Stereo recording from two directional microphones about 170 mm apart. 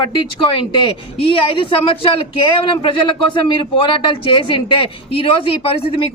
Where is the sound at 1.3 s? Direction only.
30° left (ahead or behind).